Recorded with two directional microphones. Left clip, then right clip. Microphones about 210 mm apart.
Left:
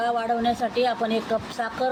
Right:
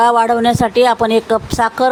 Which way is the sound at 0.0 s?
55° right (ahead or behind).